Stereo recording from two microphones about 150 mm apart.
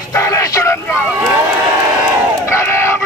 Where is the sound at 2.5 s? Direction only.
20° left (ahead or behind).